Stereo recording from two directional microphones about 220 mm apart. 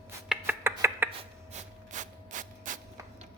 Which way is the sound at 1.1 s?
30° right (ahead or behind).